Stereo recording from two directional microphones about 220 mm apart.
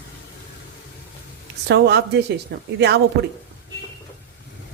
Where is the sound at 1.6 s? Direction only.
50° right (ahead or behind).